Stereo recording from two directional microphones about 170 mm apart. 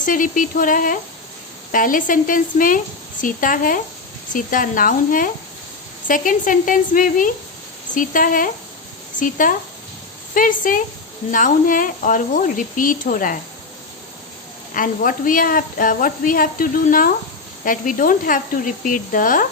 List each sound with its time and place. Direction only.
0.0 s a woman's voice: 50° left (ahead or behind)
14.7 s a woman's voice: 55° left (ahead or behind)